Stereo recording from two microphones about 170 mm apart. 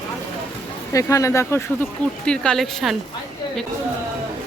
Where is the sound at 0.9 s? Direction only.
20° left (ahead or behind).